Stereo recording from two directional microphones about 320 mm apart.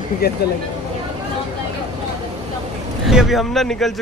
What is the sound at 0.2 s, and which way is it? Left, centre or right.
Speech, left.